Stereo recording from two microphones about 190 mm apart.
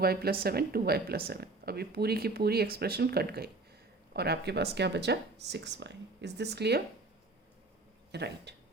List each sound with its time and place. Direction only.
0.0 s speech: 55° right (ahead or behind)
8.1 s speech: 60° right (ahead or behind)